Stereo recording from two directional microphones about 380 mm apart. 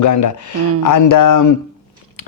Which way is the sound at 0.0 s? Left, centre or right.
Left.